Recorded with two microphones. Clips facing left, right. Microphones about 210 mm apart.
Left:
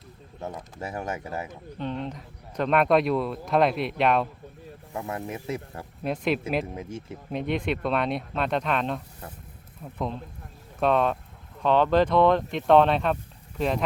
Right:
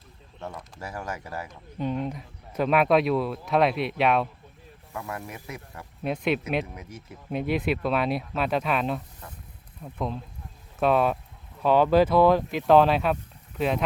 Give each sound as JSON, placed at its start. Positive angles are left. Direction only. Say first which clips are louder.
{"t": 0.3, "sound": "speech", "louder": "left 3 dB", "side_deg": 20}
{"t": 1.8, "sound": "speech", "louder": "right 3 dB", "side_deg": -10}
{"t": 4.9, "sound": "speech", "louder": "left 3 dB", "side_deg": 25}
{"t": 6.0, "sound": "speech", "louder": "even", "side_deg": 0}
{"t": 6.7, "sound": "speech", "louder": "left 7 dB", "side_deg": 25}
{"t": 7.3, "sound": "speech", "louder": "right 2 dB", "side_deg": -5}